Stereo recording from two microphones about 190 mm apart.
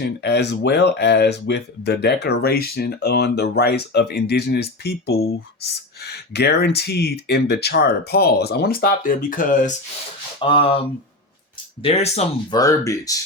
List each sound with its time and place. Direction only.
0.0 s speech: 60° left (ahead or behind); by 9.7 s 45° left (ahead or behind)
10.4 s speech: 25° left (ahead or behind)
12.5 s speech: 15° left (ahead or behind)